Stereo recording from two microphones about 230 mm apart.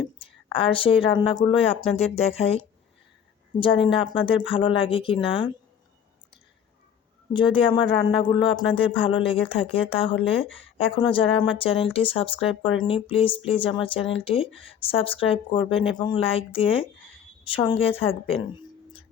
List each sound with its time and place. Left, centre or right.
0.2 s a sound: left
1.2 s speech: left
3.6 s speech: left
7.3 s speech: left